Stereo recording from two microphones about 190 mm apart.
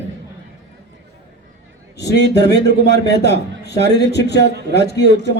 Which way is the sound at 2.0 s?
65° left (ahead or behind).